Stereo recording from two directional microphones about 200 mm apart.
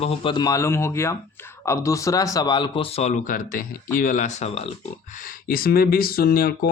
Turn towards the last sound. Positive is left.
turn(degrees=45)  # may be behind; listen again after turning